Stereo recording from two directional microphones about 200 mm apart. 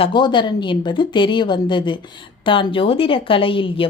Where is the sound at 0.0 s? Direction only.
25° left (ahead or behind).